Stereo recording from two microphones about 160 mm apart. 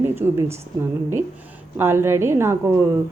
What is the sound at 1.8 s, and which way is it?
Speech, 15° right (ahead or behind).